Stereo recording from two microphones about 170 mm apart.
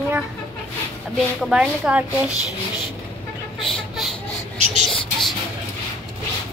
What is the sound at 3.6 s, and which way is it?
Vehicle, centre (ahead or behind).